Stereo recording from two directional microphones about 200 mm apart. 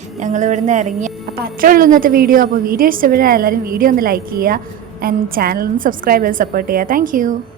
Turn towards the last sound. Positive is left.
turn(degrees=-40)  # may be behind; listen again after turning